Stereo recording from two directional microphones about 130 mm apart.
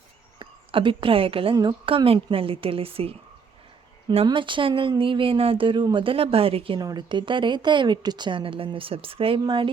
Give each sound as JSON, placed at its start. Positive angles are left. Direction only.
{"t": 0.3, "sound": "speech", "side_deg": -40}
{"t": 6.7, "sound": "a woman's voice", "side_deg": -30}